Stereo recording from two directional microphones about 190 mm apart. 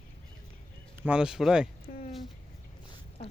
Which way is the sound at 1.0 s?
5° right (ahead or behind).